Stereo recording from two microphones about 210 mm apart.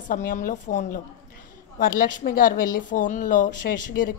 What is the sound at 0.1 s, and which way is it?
A woman's voice, 40° left (ahead or behind).